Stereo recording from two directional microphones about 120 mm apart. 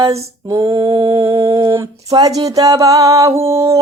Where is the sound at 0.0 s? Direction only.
30° right (ahead or behind).